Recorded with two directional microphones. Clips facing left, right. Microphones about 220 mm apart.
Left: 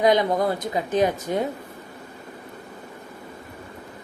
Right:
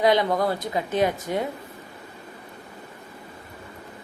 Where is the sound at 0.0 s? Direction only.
20° left (ahead or behind).